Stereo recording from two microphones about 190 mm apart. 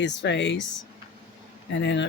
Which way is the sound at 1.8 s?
65° left (ahead or behind).